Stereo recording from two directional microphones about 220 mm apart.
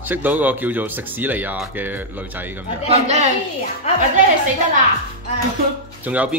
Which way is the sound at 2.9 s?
30° right (ahead or behind).